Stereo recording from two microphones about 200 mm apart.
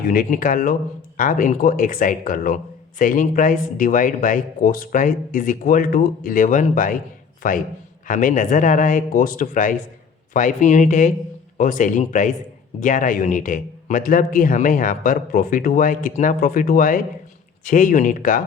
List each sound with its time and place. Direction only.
0.0 s a man's voice: 45° left (ahead or behind)